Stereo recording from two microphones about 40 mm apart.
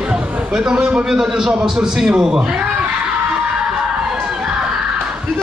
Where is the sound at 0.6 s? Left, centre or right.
Centre.